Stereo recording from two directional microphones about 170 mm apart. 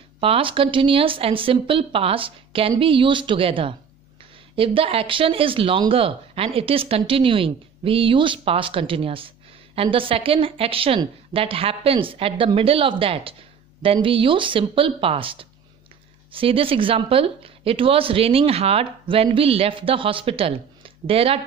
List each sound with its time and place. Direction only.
0.2 s speech: 35° right (ahead or behind)